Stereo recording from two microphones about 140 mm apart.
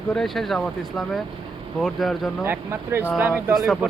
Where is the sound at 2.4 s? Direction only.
15° right (ahead or behind).